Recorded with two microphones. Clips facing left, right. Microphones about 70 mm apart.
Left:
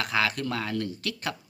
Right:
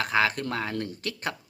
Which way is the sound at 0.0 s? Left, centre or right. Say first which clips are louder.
Right 2 dB; right.